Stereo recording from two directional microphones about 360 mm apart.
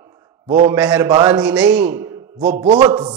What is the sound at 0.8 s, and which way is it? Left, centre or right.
A man's voice, centre.